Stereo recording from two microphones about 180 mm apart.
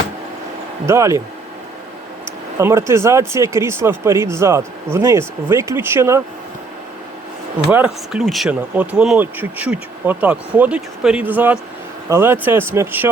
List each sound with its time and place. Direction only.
0.9 s speech: 15° right (ahead or behind)
2.6 s speech: 15° right (ahead or behind)
7.7 s speech: 5° right (ahead or behind)